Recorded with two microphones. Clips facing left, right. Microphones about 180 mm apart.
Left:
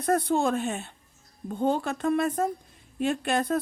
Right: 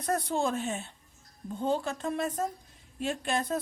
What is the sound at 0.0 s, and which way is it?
A woman's voice, 60° left (ahead or behind).